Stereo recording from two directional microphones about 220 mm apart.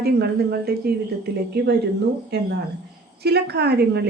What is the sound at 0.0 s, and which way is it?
A woman's voice, 45° right (ahead or behind).